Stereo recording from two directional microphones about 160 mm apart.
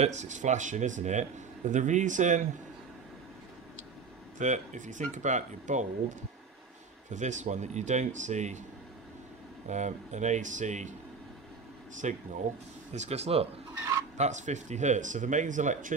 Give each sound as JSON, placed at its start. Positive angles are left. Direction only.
{"t": 0.0, "sound": "speech", "side_deg": -45}
{"t": 4.4, "sound": "speech", "side_deg": -50}
{"t": 9.7, "sound": "speech", "side_deg": -50}
{"t": 12.0, "sound": "speech", "side_deg": -50}
{"t": 13.7, "sound": "a sound", "side_deg": -20}
{"t": 14.1, "sound": "speech", "side_deg": -45}